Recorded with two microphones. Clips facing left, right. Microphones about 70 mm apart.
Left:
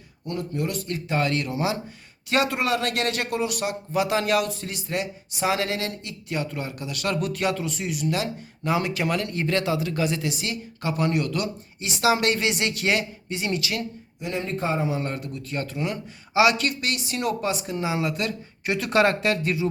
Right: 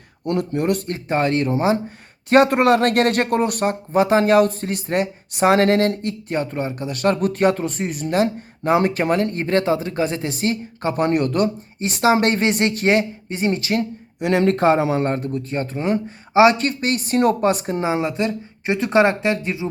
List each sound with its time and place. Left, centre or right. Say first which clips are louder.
0.3 s speech: right 8 dB; right
0.9 s speech: right 5 dB; right
2.3 s speech: right 9 dB; right
14.2 s speech: right 11 dB; right
15.0 s speech: right 9 dB; right